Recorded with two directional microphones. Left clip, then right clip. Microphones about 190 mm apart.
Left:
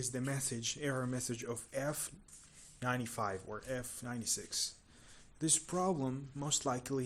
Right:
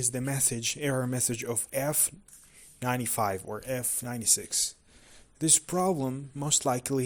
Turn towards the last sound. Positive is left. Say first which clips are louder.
# right 8 dB
turn(degrees=-35)  # may be behind; listen again after turning